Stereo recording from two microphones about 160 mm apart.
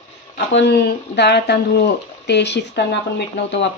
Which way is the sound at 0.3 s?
85° left.